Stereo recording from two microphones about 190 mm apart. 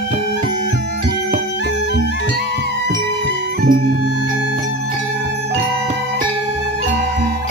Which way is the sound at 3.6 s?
45° right (ahead or behind).